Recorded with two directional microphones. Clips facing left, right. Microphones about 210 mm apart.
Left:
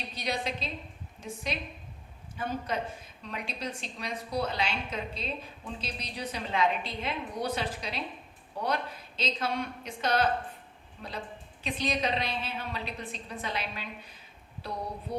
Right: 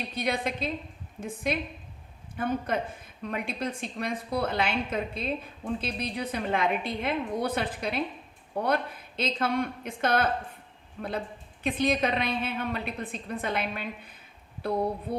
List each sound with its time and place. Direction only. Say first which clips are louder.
0.1 s a woman's voice: right 3 dB; 55° right (ahead or behind)